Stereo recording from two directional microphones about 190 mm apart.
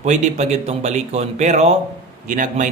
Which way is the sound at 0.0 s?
40° right (ahead or behind).